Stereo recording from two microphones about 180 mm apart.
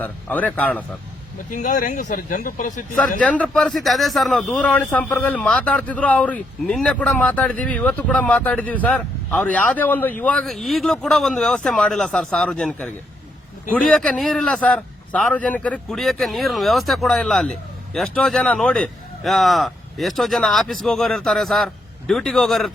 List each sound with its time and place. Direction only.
0.0 s a man's voice: 10° left (ahead or behind)
1.5 s speech: 45° left (ahead or behind)
3.2 s a man's voice: 5° left (ahead or behind)